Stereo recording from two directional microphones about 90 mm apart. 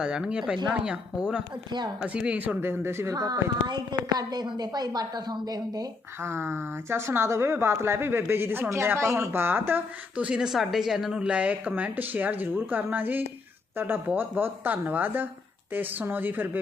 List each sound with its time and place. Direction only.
0.0 s speech: 10° right (ahead or behind)
2.6 s a woman's voice: 25° right (ahead or behind)
3.7 s a woman's voice: 50° right (ahead or behind)
6.2 s a woman's voice: 25° right (ahead or behind)